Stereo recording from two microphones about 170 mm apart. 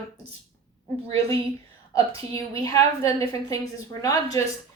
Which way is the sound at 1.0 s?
35° right (ahead or behind).